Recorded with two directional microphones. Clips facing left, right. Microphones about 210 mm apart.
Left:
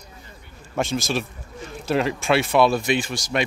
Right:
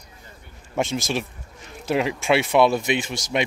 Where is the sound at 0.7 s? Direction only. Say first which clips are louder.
Even; 20° right (ahead or behind).